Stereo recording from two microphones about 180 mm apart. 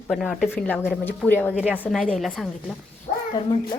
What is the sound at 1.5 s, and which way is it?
Speech, 10° right (ahead or behind).